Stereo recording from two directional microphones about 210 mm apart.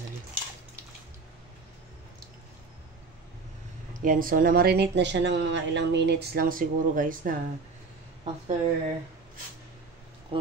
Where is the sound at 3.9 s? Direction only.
40° right (ahead or behind).